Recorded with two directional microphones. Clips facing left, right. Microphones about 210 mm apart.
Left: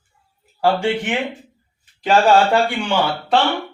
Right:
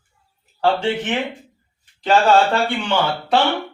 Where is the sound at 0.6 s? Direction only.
10° left (ahead or behind).